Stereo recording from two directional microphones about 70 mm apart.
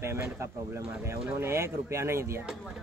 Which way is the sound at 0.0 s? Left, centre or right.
Right.